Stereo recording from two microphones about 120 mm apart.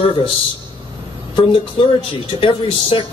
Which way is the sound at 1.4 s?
45° left (ahead or behind).